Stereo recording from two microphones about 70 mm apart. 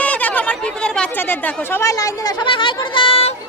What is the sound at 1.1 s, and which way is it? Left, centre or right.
Speech, left.